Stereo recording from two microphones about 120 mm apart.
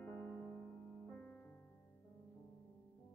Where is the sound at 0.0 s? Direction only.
15° left (ahead or behind).